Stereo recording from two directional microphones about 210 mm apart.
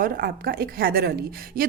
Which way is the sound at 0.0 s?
45° right (ahead or behind).